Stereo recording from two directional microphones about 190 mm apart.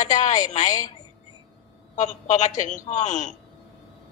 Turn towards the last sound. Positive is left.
turn(degrees=40)  # may be behind; listen again after turning